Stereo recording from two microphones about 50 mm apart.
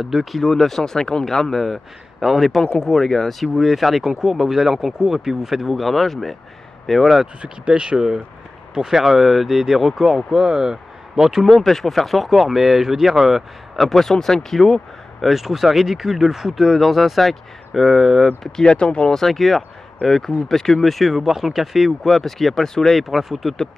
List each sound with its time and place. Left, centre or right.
0.0 s speech: centre
2.6 s speech: centre
7.4 s speech: centre
8.7 s speech: centre
13.8 s speech: centre
15.2 s speech: centre
18.4 s speech: centre
19.1 s speech: centre